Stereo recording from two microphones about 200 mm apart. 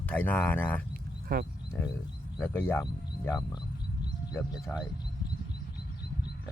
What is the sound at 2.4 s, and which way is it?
Speech, 10° left (ahead or behind).